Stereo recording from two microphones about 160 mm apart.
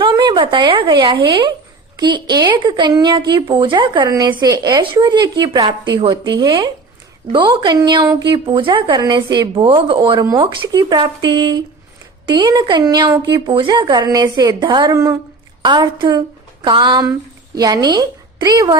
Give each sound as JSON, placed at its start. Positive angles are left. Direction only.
{"t": 0.0, "sound": "a woman's voice", "side_deg": -30}